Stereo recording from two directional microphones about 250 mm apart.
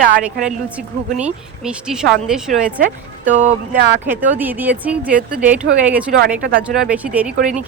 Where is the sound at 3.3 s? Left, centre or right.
Right.